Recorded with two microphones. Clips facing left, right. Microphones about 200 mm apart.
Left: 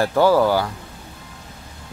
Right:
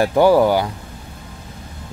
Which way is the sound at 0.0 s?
15° right (ahead or behind).